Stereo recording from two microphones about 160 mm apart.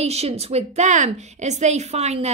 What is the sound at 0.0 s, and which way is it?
A woman's voice, 40° right (ahead or behind).